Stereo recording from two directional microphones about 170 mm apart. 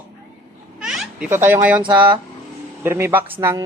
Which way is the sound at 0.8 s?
5° right (ahead or behind).